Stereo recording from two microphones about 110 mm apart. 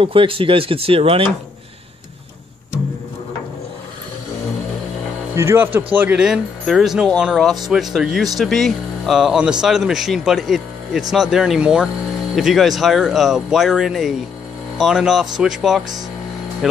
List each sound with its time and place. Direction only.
0.0 s speech: 55° right (ahead or behind)
5.3 s speech: 25° right (ahead or behind)
6.6 s speech: centre (ahead or behind)